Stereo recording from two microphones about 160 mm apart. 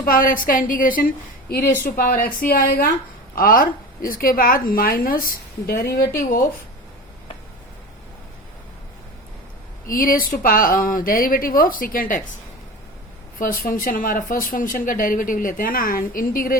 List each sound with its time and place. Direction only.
0.0 s speech: 60° left (ahead or behind)
1.6 s speech: 15° left (ahead or behind)
2.0 s speech: 65° left (ahead or behind)
6.1 s speech: 60° left (ahead or behind)
9.9 s speech: 60° left (ahead or behind)
13.4 s speech: 60° left (ahead or behind)